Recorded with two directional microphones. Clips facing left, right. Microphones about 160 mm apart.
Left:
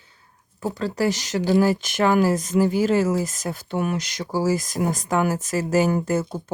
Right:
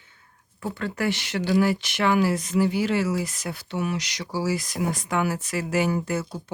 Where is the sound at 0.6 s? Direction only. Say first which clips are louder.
Left 4 dB; 40° left (ahead or behind).